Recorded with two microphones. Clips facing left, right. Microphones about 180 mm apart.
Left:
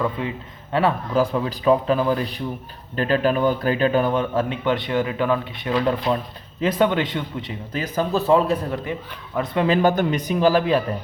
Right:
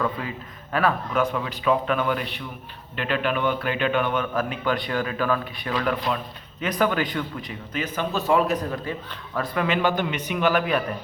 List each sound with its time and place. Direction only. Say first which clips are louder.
0.0 s speech: left 3 dB; 25° left (ahead or behind)
9.6 s speech: left 6 dB; 40° left (ahead or behind)